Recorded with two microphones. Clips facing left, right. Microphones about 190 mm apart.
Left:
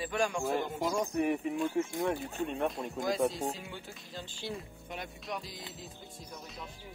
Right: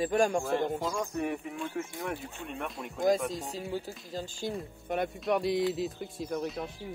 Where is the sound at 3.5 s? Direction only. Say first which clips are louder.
Right 9 dB; 40° right (ahead or behind).